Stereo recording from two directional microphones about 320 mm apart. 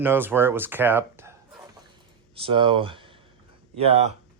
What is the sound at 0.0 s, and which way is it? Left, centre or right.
Speech, centre.